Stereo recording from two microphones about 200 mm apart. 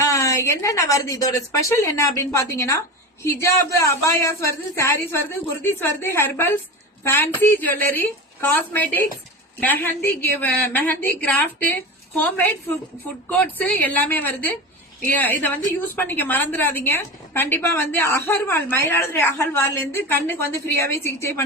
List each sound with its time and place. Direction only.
0.0 s a woman's voice: 15° left (ahead or behind)
10.1 s a woman's voice: 10° left (ahead or behind)